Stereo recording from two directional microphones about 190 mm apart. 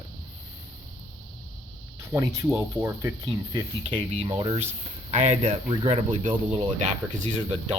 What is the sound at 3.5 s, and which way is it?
Speech, 25° right (ahead or behind).